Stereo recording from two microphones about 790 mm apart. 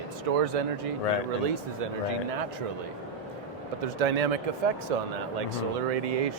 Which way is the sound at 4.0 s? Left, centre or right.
Right.